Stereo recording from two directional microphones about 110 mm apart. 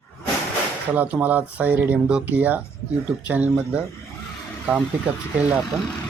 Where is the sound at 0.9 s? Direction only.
15° right (ahead or behind).